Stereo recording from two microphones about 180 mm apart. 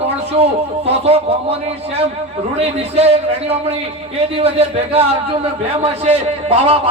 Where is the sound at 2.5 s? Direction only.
35° right (ahead or behind).